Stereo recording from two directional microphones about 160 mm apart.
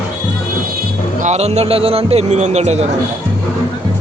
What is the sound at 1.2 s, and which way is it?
A man's voice, 45° right (ahead or behind).